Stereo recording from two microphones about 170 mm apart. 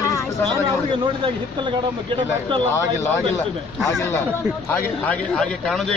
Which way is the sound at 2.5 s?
30° right (ahead or behind).